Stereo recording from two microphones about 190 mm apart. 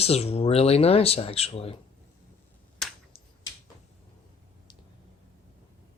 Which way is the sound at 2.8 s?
Centre (ahead or behind).